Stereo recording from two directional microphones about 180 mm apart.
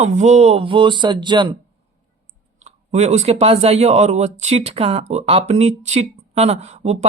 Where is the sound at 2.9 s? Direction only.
35° right (ahead or behind).